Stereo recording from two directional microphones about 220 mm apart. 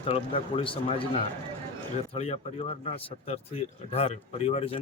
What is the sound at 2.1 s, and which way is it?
Speech, 30° left (ahead or behind).